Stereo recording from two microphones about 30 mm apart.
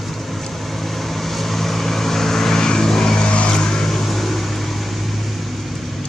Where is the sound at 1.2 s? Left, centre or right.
Centre.